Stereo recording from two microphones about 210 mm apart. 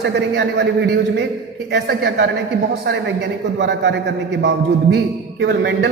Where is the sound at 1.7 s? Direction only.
50° right (ahead or behind).